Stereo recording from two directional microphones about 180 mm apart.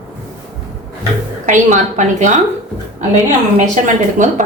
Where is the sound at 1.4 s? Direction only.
45° right (ahead or behind).